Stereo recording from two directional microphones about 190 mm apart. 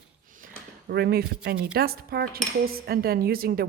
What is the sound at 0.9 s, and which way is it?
Speech, 55° right (ahead or behind).